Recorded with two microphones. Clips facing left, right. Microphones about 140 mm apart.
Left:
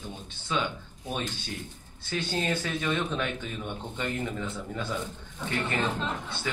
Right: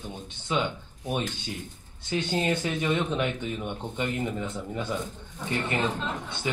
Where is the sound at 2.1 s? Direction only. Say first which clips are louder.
Right 3 dB; 20° right (ahead or behind).